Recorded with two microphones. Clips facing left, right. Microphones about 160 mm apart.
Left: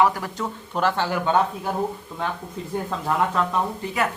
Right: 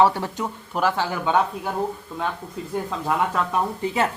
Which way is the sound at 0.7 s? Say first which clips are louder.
Left 1 dB; 10° right (ahead or behind).